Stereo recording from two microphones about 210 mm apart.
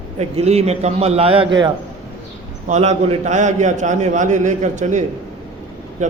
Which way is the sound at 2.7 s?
30° right (ahead or behind).